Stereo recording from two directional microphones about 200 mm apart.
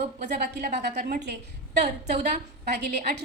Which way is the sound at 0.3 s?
55° right (ahead or behind).